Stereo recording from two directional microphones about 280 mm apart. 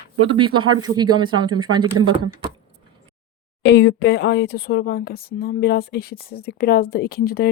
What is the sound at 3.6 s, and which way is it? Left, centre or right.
Speech, left.